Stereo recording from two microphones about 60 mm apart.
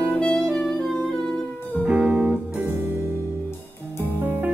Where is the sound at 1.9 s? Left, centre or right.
Centre.